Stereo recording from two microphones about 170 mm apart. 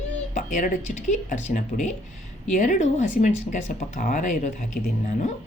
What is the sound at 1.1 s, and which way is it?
Speech, 45° left (ahead or behind).